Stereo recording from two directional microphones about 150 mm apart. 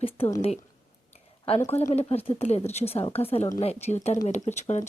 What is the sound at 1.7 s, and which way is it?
A woman's voice, 45° left (ahead or behind).